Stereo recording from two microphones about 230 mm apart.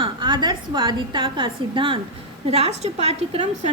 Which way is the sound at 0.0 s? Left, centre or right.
Centre.